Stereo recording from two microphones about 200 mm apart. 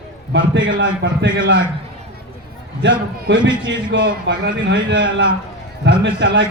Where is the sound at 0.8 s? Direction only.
65° right (ahead or behind).